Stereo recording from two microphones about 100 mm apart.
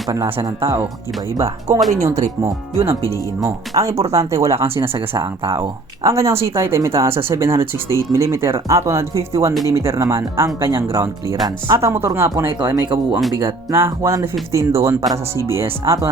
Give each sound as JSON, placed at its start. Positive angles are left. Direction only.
{"t": 0.1, "sound": "speech", "side_deg": -30}
{"t": 5.1, "sound": "speech", "side_deg": -45}
{"t": 6.0, "sound": "speech", "side_deg": -30}
{"t": 12.5, "sound": "speech", "side_deg": -50}
{"t": 13.4, "sound": "speech", "side_deg": -25}